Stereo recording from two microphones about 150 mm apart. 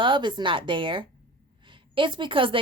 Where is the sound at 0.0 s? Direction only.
30° right (ahead or behind).